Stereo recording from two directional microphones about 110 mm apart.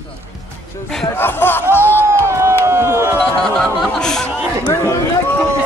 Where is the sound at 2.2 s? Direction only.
25° right (ahead or behind).